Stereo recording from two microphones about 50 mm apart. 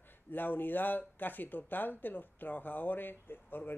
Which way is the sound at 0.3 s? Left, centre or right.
Left.